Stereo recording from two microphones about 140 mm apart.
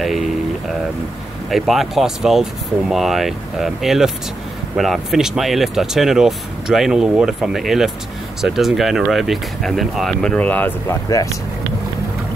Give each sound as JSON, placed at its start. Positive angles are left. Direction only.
{"t": 1.5, "sound": "speech", "side_deg": 0}
{"t": 11.1, "sound": "speech", "side_deg": 25}